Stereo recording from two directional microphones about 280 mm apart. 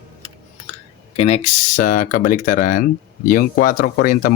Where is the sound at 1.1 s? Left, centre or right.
Left.